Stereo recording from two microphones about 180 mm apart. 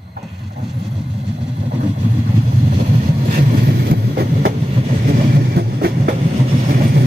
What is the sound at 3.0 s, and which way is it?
Train, 50° right (ahead or behind).